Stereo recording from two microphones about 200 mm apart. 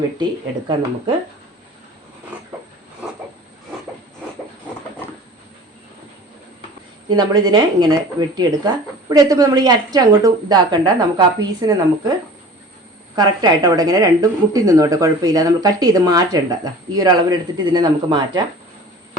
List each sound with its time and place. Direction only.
0.7 s a woman's voice: 25° right (ahead or behind)
7.1 s a woman's voice: 20° right (ahead or behind)
13.1 s a woman's voice: 20° right (ahead or behind)